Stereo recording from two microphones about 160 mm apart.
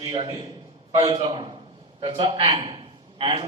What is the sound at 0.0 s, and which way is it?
A man's voice, 30° right (ahead or behind).